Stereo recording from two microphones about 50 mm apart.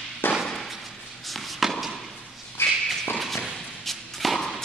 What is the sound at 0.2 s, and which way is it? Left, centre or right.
Thump, left.